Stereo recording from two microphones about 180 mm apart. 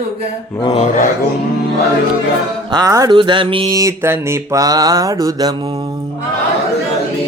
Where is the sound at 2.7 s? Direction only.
20° right (ahead or behind).